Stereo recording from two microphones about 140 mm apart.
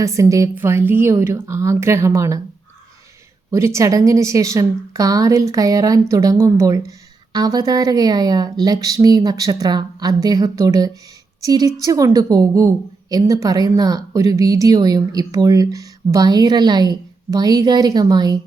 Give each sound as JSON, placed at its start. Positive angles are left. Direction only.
{"t": 0.0, "sound": "a woman's voice", "side_deg": -20}
{"t": 3.5, "sound": "a woman's voice", "side_deg": -20}